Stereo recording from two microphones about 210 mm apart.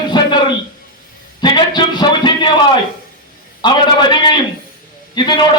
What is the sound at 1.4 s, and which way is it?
Music, 20° left (ahead or behind).